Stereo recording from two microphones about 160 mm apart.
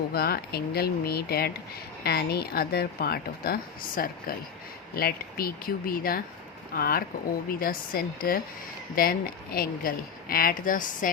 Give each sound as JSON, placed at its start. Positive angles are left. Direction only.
{"t": 0.1, "sound": "speech", "side_deg": 75}